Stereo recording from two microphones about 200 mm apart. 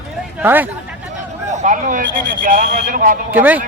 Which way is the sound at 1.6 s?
40° right (ahead or behind).